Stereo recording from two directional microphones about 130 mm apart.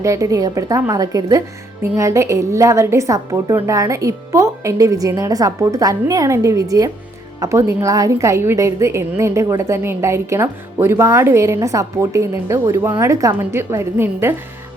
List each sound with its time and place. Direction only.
0.0 s a woman's voice: 25° right (ahead or behind)